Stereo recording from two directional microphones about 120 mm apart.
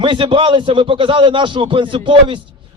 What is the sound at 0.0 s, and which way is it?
A man's voice, 45° right (ahead or behind).